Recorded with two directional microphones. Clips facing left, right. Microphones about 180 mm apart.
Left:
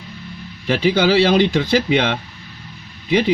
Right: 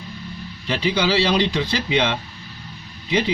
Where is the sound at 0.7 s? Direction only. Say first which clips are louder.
Left 5 dB; 55° left (ahead or behind).